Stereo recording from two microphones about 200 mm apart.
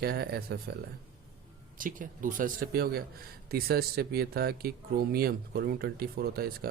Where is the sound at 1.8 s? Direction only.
45° right (ahead or behind).